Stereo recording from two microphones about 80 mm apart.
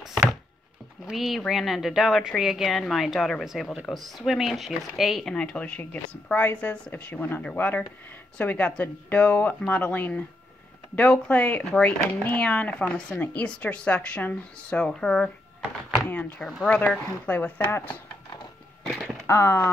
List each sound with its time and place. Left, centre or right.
1.0 s speech: centre
5.3 s a woman's voice: centre
16.1 s speech: centre
18.9 s speech: centre
19.2 s speech: left